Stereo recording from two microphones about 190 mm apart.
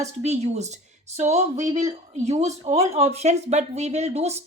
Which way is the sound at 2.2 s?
35° right (ahead or behind).